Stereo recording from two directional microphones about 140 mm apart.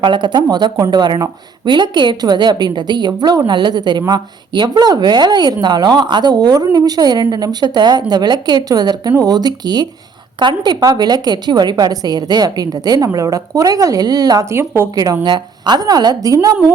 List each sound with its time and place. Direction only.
0.0 s a woman's voice: 35° right (ahead or behind)